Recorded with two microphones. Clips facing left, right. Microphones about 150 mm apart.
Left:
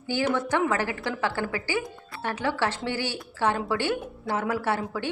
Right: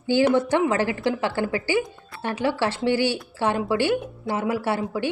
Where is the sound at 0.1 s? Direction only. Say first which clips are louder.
Right 6 dB; 25° right (ahead or behind).